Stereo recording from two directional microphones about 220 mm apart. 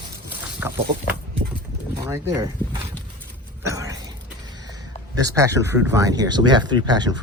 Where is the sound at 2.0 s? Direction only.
15° right (ahead or behind).